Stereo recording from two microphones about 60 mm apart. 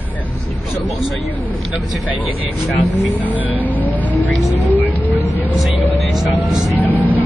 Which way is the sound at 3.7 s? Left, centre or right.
Left.